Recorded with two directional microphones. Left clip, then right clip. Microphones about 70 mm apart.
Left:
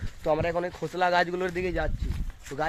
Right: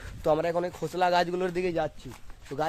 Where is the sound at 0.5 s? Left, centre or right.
Right.